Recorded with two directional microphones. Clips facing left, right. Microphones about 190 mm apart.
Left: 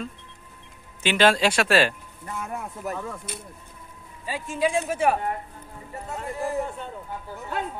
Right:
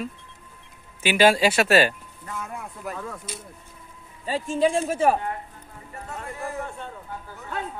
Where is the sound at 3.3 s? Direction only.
60° left (ahead or behind).